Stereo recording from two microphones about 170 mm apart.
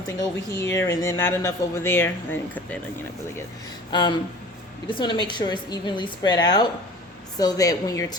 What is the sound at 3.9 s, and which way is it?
A woman's voice, 25° left (ahead or behind).